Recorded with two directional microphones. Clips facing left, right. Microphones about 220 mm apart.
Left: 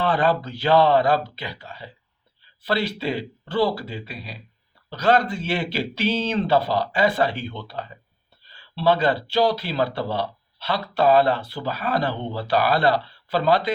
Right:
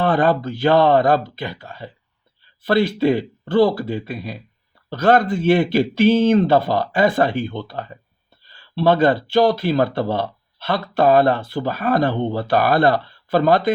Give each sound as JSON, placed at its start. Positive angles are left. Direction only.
{"t": 0.0, "sound": "speech", "side_deg": -50}